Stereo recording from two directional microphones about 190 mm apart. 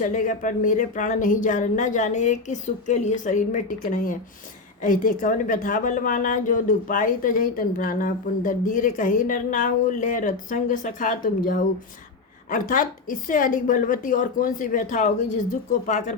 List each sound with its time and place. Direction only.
0.0 s a woman's voice: 40° left (ahead or behind)